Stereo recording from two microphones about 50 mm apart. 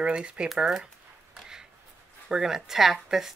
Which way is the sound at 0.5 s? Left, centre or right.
Centre.